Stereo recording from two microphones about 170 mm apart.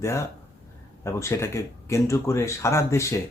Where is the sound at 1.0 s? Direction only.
15° left (ahead or behind).